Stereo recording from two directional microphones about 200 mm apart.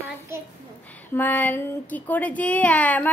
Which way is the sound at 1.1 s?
10° left (ahead or behind).